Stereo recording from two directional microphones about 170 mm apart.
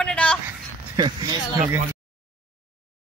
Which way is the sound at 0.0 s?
5° left (ahead or behind).